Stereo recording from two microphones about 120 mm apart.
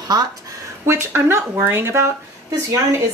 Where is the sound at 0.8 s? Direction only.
20° right (ahead or behind).